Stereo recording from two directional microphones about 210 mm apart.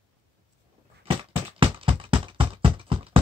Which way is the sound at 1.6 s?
25° right (ahead or behind).